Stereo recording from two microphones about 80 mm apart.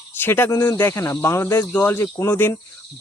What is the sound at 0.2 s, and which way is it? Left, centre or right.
Speech, left.